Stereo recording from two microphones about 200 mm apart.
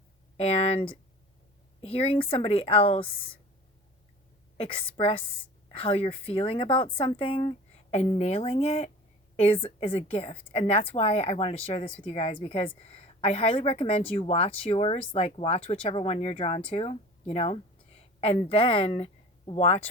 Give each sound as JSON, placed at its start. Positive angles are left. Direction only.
{"t": 0.3, "sound": "speech", "side_deg": 30}
{"t": 4.5, "sound": "speech", "side_deg": 30}